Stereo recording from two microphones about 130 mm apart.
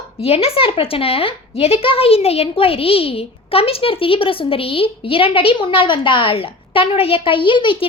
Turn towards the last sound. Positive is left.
turn(degrees=40)  # may be behind; listen again after turning